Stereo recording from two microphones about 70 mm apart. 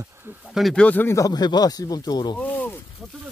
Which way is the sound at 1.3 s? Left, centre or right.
Left.